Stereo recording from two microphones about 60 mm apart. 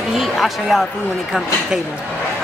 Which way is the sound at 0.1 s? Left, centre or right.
Centre.